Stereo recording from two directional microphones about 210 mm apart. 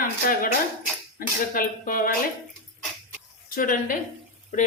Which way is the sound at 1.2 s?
40° left (ahead or behind).